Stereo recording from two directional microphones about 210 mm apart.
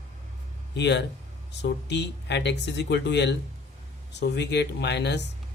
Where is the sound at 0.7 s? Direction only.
55° left (ahead or behind).